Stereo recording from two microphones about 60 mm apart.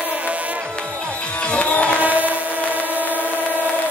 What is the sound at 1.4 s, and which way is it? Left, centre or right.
Music, centre.